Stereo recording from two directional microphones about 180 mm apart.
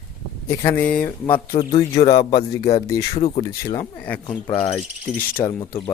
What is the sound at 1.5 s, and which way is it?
Speech, 30° left (ahead or behind).